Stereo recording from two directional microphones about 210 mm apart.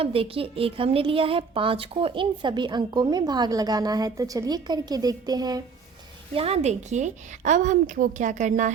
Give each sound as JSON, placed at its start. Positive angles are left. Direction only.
{"t": 0.0, "sound": "a woman's voice", "side_deg": -25}
{"t": 6.3, "sound": "a woman's voice", "side_deg": -30}